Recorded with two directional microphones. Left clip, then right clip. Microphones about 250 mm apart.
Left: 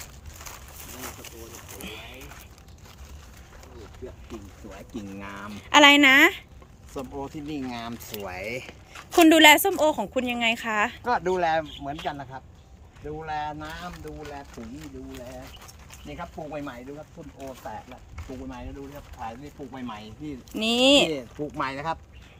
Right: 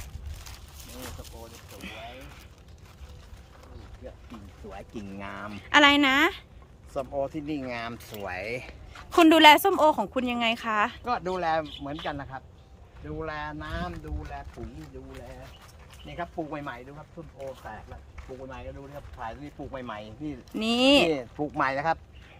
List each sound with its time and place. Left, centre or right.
1.8 s speech: centre
5.2 s speech: right
5.6 s speech: centre
7.4 s speech: centre
14.6 s speech: left
16.1 s speech: centre
19.7 s speech: centre